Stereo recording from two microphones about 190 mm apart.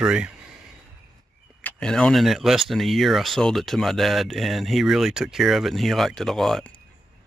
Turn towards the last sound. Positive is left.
turn(degrees=0)  # may be behind; listen again after turning